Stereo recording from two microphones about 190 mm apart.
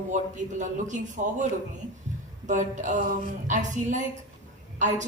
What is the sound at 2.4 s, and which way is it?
A woman's voice, 40° right (ahead or behind).